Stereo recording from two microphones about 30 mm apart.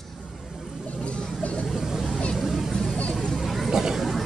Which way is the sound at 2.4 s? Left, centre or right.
Centre.